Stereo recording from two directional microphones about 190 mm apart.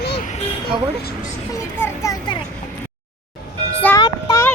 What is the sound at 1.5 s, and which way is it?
Speech, 15° left (ahead or behind).